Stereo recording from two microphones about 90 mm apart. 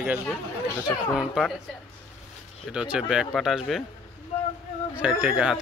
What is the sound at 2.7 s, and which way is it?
Speech, 10° right (ahead or behind).